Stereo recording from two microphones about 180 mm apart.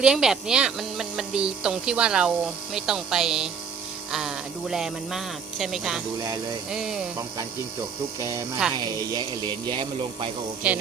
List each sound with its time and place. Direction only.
0.0 s speech: 5° right (ahead or behind)
8.2 s speech: 15° right (ahead or behind)
10.6 s speech: 5° right (ahead or behind)